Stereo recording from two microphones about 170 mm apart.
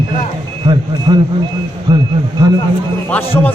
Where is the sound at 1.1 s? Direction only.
25° right (ahead or behind).